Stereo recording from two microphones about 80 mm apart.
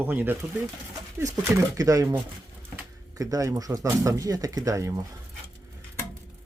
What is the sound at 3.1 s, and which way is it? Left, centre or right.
Speech, right.